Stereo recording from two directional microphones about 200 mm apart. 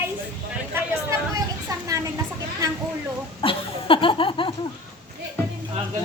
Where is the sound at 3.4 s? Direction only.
25° left (ahead or behind).